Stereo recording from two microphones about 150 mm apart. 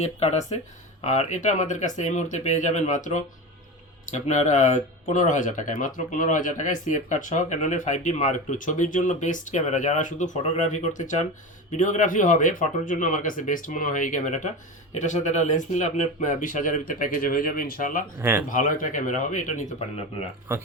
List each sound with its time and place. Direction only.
0.0 s speech: 45° left (ahead or behind); by 18.0 s 65° left (ahead or behind)
18.2 s speech: 15° right (ahead or behind)
18.4 s speech: 65° left (ahead or behind)